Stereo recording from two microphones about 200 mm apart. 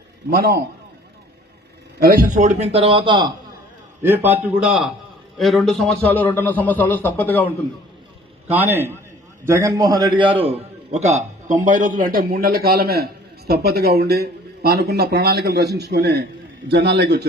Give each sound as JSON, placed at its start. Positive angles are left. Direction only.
{"t": 0.3, "sound": "a man's voice", "side_deg": -50}
{"t": 2.0, "sound": "a man's voice", "side_deg": -45}
{"t": 4.0, "sound": "a man's voice", "side_deg": -10}
{"t": 8.4, "sound": "a man's voice", "side_deg": -10}